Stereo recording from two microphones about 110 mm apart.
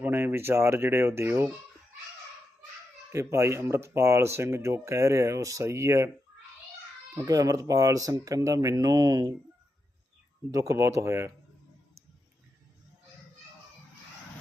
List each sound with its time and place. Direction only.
0.0 s speech: 20° right (ahead or behind)
3.1 s speech: 25° right (ahead or behind)
7.1 s speech: 30° right (ahead or behind)
10.5 s speech: 30° right (ahead or behind)